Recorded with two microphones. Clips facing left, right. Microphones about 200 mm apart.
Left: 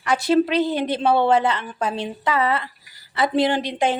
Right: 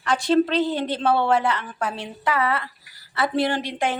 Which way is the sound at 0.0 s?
10° left (ahead or behind).